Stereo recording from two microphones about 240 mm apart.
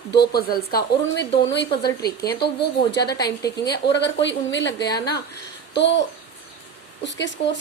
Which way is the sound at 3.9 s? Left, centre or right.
Left.